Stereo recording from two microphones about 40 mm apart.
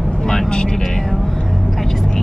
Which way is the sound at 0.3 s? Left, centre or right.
Left.